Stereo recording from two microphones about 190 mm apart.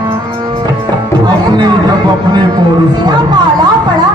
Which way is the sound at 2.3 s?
20° right (ahead or behind).